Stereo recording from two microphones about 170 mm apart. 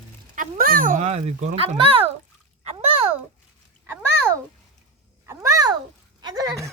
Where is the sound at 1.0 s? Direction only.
40° right (ahead or behind).